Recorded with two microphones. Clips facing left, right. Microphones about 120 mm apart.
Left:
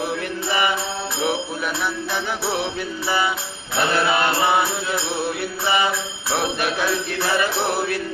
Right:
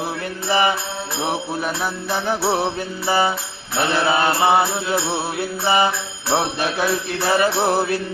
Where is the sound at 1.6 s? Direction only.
35° right (ahead or behind).